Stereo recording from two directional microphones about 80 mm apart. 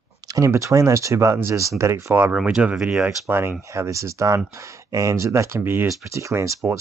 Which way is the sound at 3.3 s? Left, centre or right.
Right.